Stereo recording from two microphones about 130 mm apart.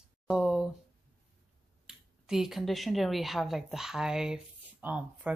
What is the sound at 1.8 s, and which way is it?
Speech, 5° right (ahead or behind).